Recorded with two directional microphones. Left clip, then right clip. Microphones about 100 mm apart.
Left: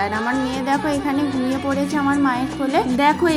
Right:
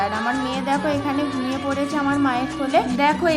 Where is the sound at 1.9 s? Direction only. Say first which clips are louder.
Left 2 dB; 35° left (ahead or behind).